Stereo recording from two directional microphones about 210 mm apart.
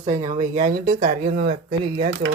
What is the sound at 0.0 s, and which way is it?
Speech, 35° right (ahead or behind).